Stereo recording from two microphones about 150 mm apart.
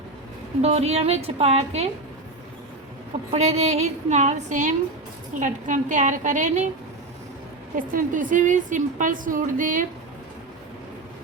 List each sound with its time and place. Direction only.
0.6 s a woman's voice: 45° right (ahead or behind)
3.3 s a woman's voice: 45° right (ahead or behind)
7.8 s a woman's voice: 65° right (ahead or behind)